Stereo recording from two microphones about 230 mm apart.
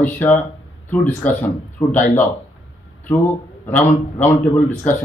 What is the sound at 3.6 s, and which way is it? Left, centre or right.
Speech, centre.